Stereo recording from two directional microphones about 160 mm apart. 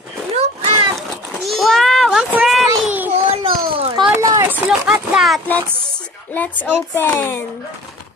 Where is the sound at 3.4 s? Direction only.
35° right (ahead or behind).